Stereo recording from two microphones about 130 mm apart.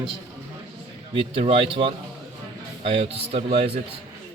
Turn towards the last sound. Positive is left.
turn(degrees=-55)  # may be behind; listen again after turning